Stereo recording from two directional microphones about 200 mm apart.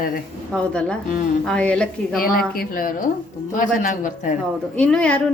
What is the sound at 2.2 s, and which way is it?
A man's voice, 45° left (ahead or behind).